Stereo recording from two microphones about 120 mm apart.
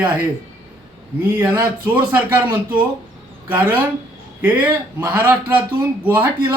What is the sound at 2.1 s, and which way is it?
Speech, 15° right (ahead or behind).